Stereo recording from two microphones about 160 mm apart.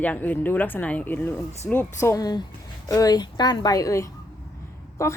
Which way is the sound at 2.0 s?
20° left (ahead or behind).